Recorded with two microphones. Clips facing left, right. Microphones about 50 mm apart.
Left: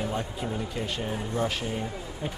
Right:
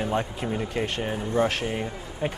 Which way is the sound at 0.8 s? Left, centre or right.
Right.